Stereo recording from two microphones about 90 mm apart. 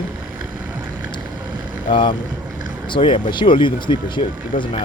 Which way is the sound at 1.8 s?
65° left (ahead or behind).